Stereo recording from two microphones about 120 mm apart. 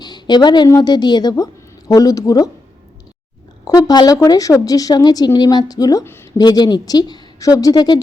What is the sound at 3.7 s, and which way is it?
A woman's voice, 30° left (ahead or behind).